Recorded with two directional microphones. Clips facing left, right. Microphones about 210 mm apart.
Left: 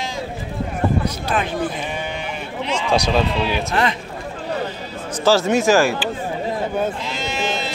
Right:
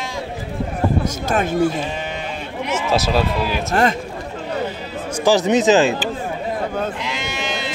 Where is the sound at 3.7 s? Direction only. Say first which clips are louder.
Right 7 dB; 45° right (ahead or behind).